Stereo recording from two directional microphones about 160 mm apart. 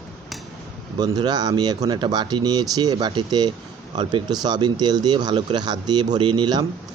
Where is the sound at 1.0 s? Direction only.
25° right (ahead or behind).